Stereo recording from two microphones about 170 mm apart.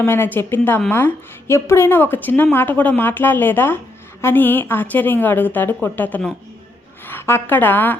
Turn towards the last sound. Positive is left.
turn(degrees=10)  # may be behind; listen again after turning